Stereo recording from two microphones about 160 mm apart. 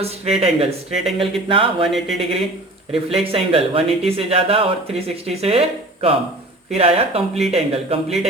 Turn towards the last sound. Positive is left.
turn(degrees=-40)  # may be behind; listen again after turning